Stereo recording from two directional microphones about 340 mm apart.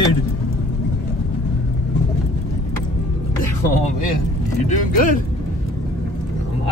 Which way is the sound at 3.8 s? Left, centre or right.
Left.